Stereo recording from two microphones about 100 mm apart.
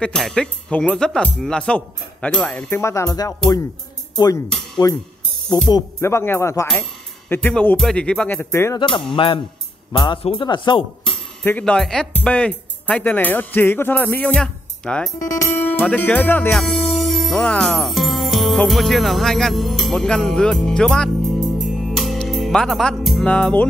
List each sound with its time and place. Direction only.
0.0 s speech: 5° left (ahead or behind)
2.7 s speech: 30° left (ahead or behind); by 5.7 s 45° left (ahead or behind)
5.9 s speech: 25° left (ahead or behind)
7.3 s speech: 10° left (ahead or behind)
8.4 s speech: 25° left (ahead or behind)
8.7 s speech: 55° left (ahead or behind)
9.9 s speech: 50° left (ahead or behind)
11.4 s speech: 15° left (ahead or behind)
16.5 s music: centre (ahead or behind)
23.2 s speech: 10° left (ahead or behind)